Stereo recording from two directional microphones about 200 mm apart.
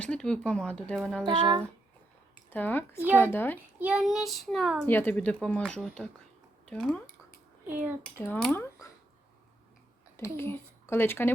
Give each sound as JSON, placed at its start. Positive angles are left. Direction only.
{"t": 0.0, "sound": "a child's voice", "side_deg": 5}
{"t": 1.2, "sound": "speech", "side_deg": -20}
{"t": 2.5, "sound": "speech", "side_deg": 10}
{"t": 3.8, "sound": "a child's voice", "side_deg": -5}
{"t": 8.2, "sound": "speech", "side_deg": 5}
{"t": 10.2, "sound": "speech", "side_deg": 10}